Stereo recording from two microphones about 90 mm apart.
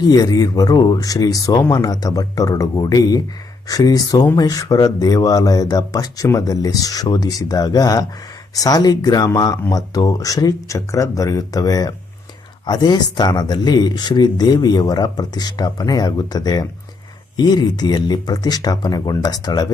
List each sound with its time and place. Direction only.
0.0 s speech: 45° left (ahead or behind)